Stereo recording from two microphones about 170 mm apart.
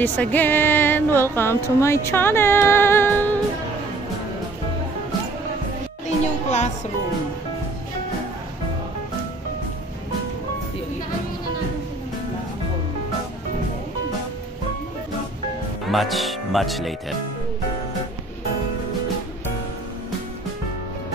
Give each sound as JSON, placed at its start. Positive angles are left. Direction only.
{"t": 0.0, "sound": "speech", "side_deg": 10}
{"t": 6.0, "sound": "a child's voice", "side_deg": 40}
{"t": 15.9, "sound": "speech", "side_deg": 0}